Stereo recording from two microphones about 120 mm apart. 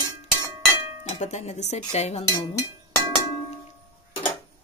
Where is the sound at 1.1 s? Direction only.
70° left (ahead or behind).